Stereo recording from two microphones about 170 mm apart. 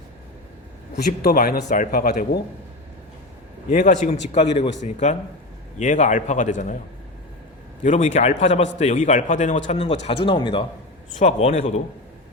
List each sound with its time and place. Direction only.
0.9 s a man's voice: 60° left (ahead or behind)
3.7 s a man's voice: 45° left (ahead or behind)
7.9 s a man's voice: 45° left (ahead or behind); by 10.7 s 30° left (ahead or behind)
11.2 s a man's voice: 40° left (ahead or behind)